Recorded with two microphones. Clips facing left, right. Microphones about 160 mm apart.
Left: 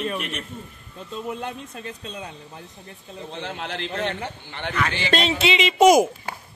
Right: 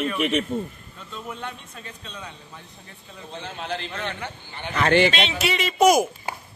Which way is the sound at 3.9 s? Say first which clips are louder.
Left 4 dB; 40° left (ahead or behind).